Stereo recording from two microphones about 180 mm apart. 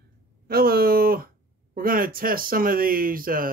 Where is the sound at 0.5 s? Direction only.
55° right (ahead or behind).